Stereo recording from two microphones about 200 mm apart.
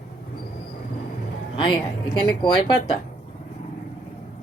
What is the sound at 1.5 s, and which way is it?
Speech, 25° left (ahead or behind).